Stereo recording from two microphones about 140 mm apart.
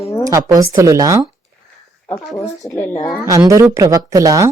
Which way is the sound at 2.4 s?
25° left (ahead or behind).